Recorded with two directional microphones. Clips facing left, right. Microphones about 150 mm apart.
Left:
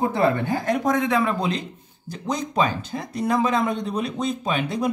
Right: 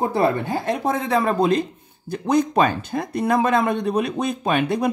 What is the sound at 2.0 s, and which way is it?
Speech, 60° right (ahead or behind).